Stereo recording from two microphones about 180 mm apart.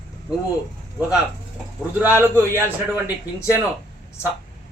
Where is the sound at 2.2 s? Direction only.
15° right (ahead or behind).